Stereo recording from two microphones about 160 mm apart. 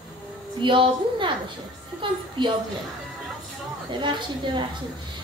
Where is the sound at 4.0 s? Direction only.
30° right (ahead or behind).